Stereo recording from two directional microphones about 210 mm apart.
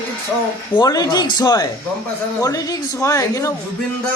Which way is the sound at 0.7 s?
20° left (ahead or behind).